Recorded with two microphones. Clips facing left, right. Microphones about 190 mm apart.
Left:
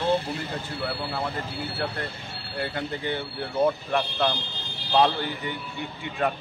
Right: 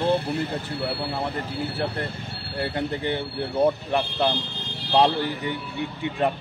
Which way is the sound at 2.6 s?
30° right (ahead or behind).